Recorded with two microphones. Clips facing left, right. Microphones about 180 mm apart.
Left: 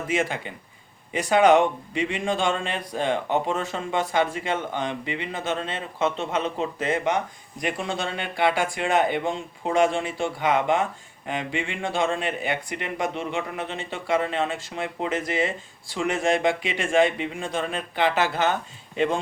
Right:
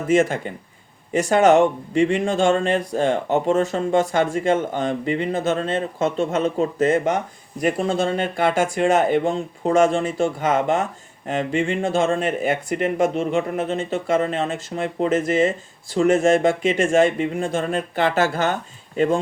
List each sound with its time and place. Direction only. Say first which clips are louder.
0.1 s speech: right 9 dB; 45° right (ahead or behind)